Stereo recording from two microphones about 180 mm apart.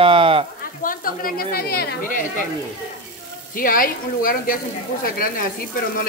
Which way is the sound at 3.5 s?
50° left (ahead or behind).